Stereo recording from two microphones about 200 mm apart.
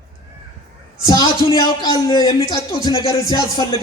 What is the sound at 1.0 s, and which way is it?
A man's voice, 20° left (ahead or behind).